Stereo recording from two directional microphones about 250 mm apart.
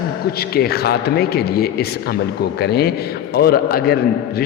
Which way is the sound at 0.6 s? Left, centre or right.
Left.